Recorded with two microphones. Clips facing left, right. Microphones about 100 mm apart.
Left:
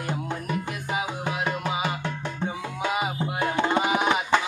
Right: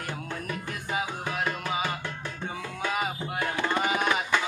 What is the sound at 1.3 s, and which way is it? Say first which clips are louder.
Music: left 2 dB; 15° left (ahead or behind).